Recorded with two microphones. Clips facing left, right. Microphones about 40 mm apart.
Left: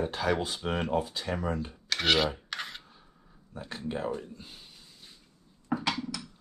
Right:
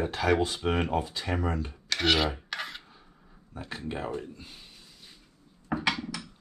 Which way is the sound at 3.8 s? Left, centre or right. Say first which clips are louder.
Left 1 dB; right.